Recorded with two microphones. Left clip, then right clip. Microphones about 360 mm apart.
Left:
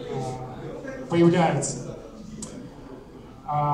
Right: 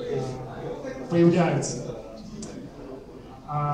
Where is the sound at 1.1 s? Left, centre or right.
Left.